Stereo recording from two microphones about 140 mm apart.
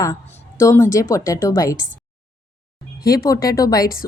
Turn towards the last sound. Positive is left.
turn(degrees=25)  # may be behind; listen again after turning